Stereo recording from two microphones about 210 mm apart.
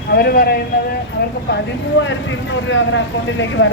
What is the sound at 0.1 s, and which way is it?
Speech, 50° left (ahead or behind).